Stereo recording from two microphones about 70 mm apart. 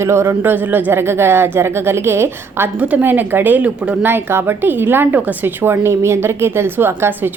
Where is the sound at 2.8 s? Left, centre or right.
Right.